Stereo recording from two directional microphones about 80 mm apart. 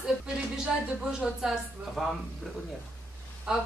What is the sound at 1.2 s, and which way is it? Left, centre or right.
Speech, centre.